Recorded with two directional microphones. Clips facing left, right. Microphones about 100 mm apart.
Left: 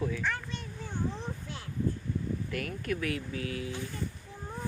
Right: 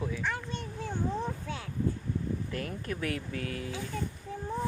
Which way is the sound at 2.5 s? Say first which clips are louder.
Left 2 dB; 30° right (ahead or behind).